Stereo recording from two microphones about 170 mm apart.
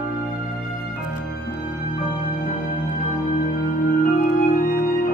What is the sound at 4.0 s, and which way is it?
Music, 50° left (ahead or behind).